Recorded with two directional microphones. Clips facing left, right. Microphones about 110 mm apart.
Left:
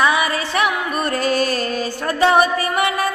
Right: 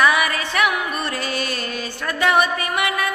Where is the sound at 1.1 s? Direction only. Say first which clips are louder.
Left 7 dB; 40° left (ahead or behind).